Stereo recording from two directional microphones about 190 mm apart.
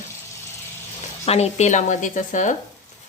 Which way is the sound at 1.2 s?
35° left (ahead or behind).